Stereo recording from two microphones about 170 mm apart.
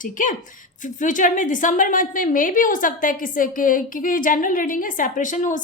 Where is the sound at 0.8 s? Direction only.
50° left (ahead or behind).